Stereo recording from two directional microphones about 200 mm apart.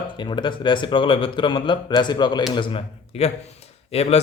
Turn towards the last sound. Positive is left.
turn(degrees=30)  # may be behind; listen again after turning